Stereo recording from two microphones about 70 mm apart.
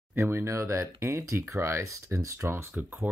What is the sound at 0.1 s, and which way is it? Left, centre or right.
Speech, right.